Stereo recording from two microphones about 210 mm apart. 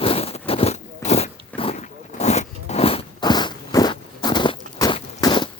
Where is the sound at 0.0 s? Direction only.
25° left (ahead or behind).